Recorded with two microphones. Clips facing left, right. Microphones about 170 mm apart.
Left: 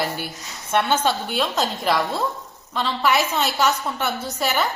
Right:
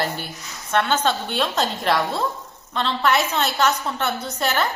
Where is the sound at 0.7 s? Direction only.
15° left (ahead or behind).